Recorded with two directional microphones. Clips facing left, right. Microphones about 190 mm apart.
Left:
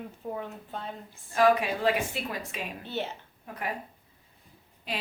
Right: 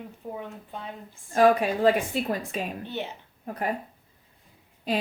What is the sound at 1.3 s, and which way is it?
Speech, 35° right (ahead or behind).